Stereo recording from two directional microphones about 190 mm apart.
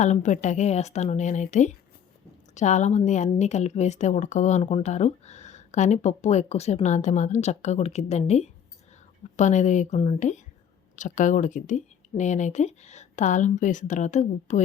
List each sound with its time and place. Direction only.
0.0 s speech: 40° left (ahead or behind)